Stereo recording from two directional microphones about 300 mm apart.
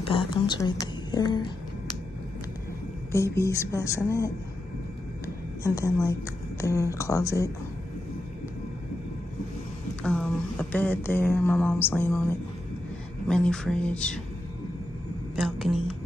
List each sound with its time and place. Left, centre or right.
0.0 s a woman's voice: centre
3.3 s speech: centre
5.2 s a sound: centre
6.6 s speech: centre
10.0 s speech: centre
15.3 s speech: centre